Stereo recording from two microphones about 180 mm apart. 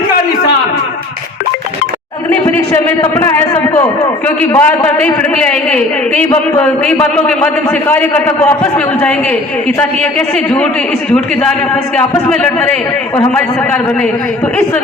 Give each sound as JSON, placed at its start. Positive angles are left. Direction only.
{"t": 3.2, "sound": "a man's voice", "side_deg": 15}
{"t": 9.6, "sound": "a man's voice", "side_deg": 5}
{"t": 11.7, "sound": "a man's voice", "side_deg": 5}